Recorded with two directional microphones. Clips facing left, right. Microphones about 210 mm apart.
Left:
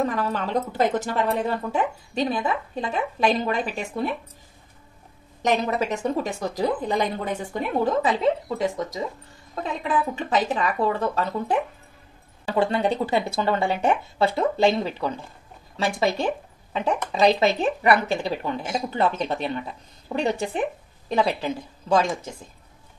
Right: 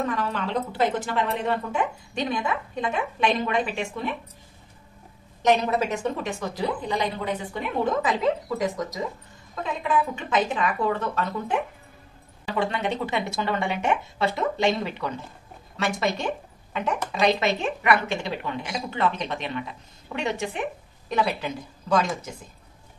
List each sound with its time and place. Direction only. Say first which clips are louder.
0.0 s speech: left 2 dB; 40° left (ahead or behind)
5.5 s a woman's voice: right 1 dB; 40° left (ahead or behind)
8.2 s a woman's voice: left 2 dB; 25° left (ahead or behind)
12.5 s speech: left 4 dB; 35° left (ahead or behind)
17.6 s a woman's voice: left 3 dB; 35° left (ahead or behind)